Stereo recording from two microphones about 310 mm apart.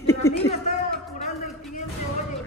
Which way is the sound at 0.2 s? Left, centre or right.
Centre.